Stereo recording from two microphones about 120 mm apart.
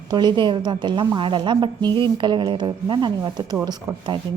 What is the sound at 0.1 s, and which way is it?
A woman's voice, 40° right (ahead or behind).